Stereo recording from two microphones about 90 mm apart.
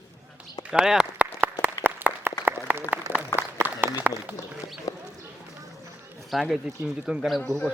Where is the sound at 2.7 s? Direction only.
20° right (ahead or behind).